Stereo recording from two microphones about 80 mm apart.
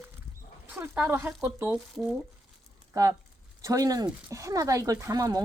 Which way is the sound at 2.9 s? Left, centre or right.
Right.